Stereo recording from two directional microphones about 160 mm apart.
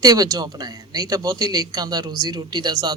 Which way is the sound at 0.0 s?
25° right (ahead or behind).